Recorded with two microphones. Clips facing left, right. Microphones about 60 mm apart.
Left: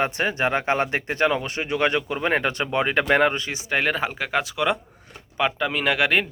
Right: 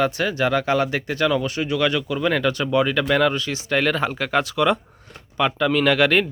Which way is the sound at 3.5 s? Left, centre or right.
Centre.